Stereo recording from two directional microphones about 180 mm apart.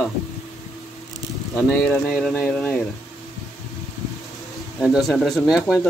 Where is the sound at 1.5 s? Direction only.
5° left (ahead or behind).